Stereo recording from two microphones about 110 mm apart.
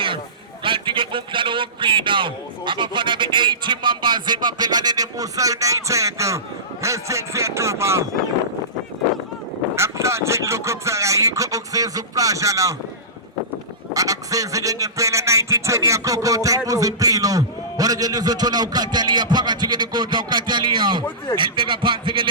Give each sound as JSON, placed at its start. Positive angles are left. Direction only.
{"t": 0.6, "sound": "a man's voice", "side_deg": -50}
{"t": 9.7, "sound": "speech", "side_deg": -25}
{"t": 13.9, "sound": "a man's voice", "side_deg": -30}